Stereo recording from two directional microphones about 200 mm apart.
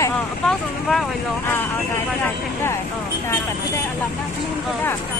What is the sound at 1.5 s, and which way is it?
Speech, 10° left (ahead or behind).